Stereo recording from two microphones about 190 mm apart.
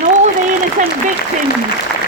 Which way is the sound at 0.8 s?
40° right (ahead or behind).